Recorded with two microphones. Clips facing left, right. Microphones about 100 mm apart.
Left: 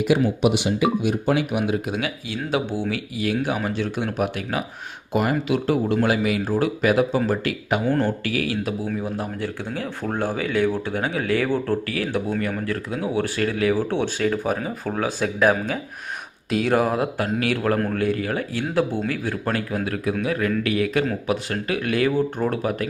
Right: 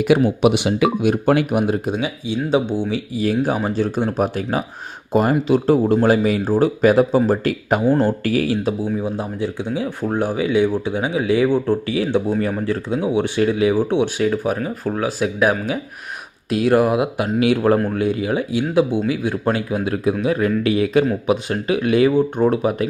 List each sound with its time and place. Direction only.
0.1 s speech: 90° right
0.4 s speech: 65° right (ahead or behind)
1.5 s speech: 40° right (ahead or behind)
1.9 s speech: 20° right (ahead or behind)
3.4 s speech: 35° right (ahead or behind)
8.9 s speech: 20° right (ahead or behind)
12.3 s speech: 30° right (ahead or behind); by 17.4 s 10° right (ahead or behind)
17.4 s speech: 20° right (ahead or behind)